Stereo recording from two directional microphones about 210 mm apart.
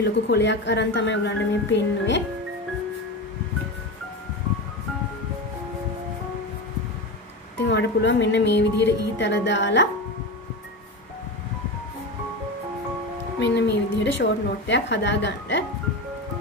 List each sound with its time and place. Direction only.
0.0 s speech: 55° left (ahead or behind)
7.6 s speech: 55° left (ahead or behind)
13.4 s speech: 55° left (ahead or behind)